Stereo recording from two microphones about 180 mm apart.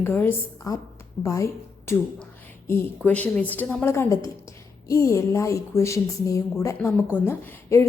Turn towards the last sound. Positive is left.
turn(degrees=15)  # may be behind; listen again after turning